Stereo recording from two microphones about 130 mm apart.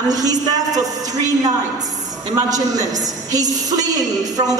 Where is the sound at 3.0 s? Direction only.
30° right (ahead or behind).